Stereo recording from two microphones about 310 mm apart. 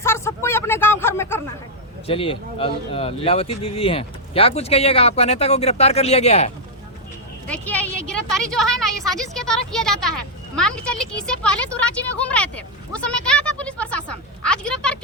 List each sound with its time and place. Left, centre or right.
0.0 s a sound: centre
2.0 s speech: centre
7.4 s a woman's voice: centre